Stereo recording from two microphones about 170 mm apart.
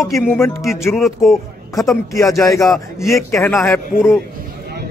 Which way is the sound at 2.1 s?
20° left (ahead or behind).